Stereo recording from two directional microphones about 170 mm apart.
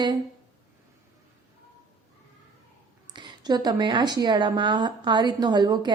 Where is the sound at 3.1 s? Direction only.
25° right (ahead or behind).